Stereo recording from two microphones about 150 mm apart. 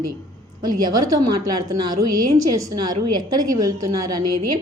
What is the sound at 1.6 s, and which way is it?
A woman's voice, 25° right (ahead or behind).